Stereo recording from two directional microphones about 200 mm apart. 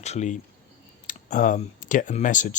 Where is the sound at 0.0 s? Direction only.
35° left (ahead or behind).